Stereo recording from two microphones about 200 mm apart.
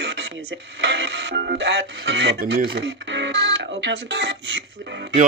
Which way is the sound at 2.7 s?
60° right (ahead or behind).